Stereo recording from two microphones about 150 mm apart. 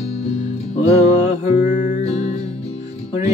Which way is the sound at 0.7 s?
45° left (ahead or behind).